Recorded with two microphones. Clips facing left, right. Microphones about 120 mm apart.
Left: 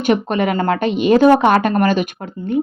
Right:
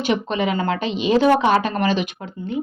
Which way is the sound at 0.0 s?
50° left (ahead or behind).